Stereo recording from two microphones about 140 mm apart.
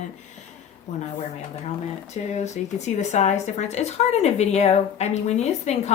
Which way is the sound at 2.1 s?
55° left (ahead or behind).